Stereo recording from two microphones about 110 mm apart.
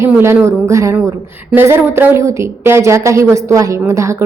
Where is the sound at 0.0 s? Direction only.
25° right (ahead or behind).